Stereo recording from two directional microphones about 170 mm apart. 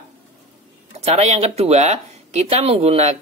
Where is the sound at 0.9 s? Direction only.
40° right (ahead or behind).